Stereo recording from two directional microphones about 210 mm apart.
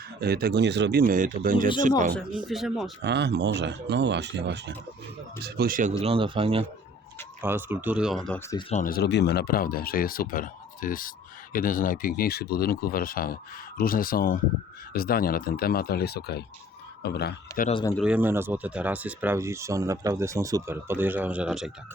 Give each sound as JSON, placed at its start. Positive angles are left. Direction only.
{"t": 0.2, "sound": "speech", "side_deg": -45}
{"t": 2.5, "sound": "speech", "side_deg": 0}
{"t": 3.0, "sound": "speech", "side_deg": -55}
{"t": 6.0, "sound": "speech", "side_deg": -25}
{"t": 7.4, "sound": "speech", "side_deg": -10}
{"t": 8.7, "sound": "speech", "side_deg": 40}
{"t": 17.9, "sound": "speech", "side_deg": -5}